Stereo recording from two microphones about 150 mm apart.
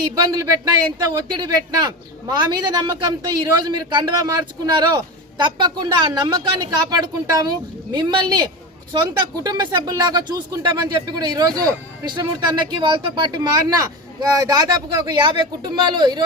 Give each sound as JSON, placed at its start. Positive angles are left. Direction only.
{"t": 0.0, "sound": "a woman's voice", "side_deg": -25}